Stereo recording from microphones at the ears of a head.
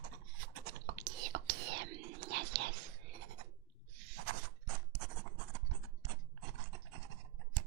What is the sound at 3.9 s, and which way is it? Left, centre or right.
Scratch, right.